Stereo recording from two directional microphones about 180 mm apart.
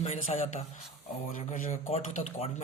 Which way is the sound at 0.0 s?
40° left (ahead or behind).